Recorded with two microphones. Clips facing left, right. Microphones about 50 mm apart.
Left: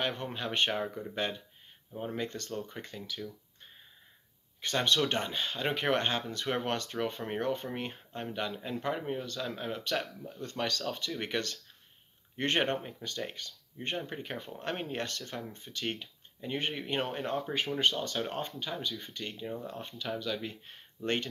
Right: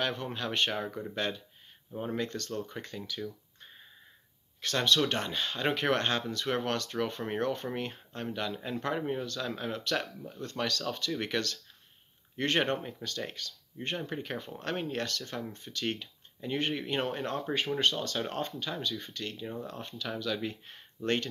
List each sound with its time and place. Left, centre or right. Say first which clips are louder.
0.0 s speech: right 1 dB; centre
4.6 s speech: right 1 dB; centre
6.3 s speech: right 1 dB; centre
9.2 s speech: right 2 dB; centre
13.0 s speech: right 1 dB; centre
13.4 s speech: right 2 dB; centre
13.8 s speech: right 1 dB; centre
19.4 s speech: left 2 dB; centre
19.7 s speech: even; centre